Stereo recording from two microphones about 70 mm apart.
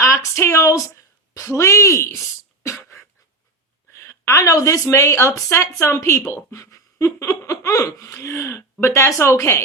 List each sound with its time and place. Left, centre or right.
0.0 s a woman's voice: left
3.9 s a woman's voice: left